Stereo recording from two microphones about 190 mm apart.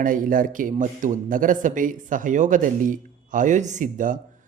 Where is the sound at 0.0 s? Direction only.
45° right (ahead or behind).